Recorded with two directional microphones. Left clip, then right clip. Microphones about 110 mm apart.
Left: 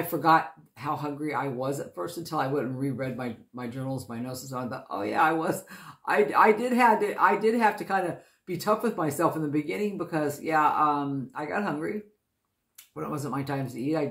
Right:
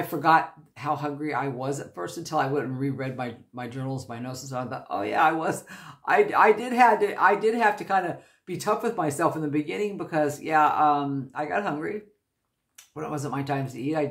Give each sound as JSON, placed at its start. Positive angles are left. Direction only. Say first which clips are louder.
{"t": 0.0, "sound": "speech", "louder": "right 1 dB", "side_deg": -15}
{"t": 12.9, "sound": "speech", "louder": "right 1 dB", "side_deg": -15}